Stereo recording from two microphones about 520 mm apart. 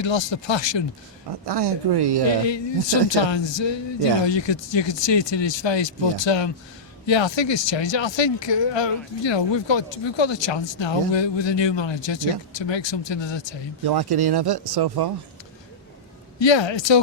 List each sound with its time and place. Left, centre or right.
0.0 s speech: left
1.3 s speech: right
2.4 s speech: left
13.8 s speech: right
16.4 s speech: left